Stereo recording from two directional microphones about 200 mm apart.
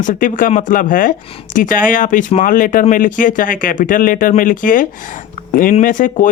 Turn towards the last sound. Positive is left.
turn(degrees=40)  # may be behind; listen again after turning